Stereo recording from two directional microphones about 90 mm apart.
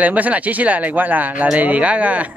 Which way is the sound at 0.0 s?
15° right (ahead or behind).